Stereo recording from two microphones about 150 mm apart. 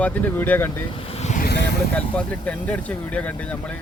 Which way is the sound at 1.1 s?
50° left (ahead or behind).